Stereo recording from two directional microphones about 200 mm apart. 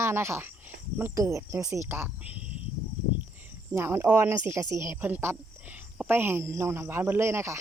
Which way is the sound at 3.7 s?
10° right (ahead or behind).